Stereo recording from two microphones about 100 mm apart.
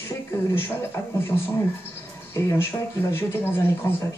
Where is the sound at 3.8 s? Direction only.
25° left (ahead or behind).